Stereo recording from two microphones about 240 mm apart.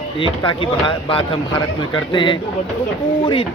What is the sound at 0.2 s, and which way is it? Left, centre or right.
Speech, left.